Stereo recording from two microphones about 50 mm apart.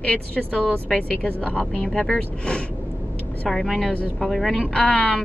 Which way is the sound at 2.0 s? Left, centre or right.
Centre.